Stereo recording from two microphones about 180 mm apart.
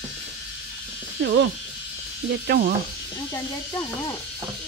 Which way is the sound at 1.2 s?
70° right (ahead or behind).